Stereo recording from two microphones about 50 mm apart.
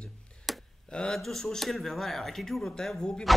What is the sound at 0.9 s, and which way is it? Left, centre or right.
Speech, centre.